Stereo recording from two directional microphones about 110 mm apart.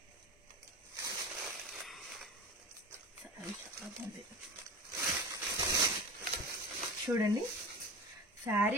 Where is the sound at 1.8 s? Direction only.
Centre (ahead or behind).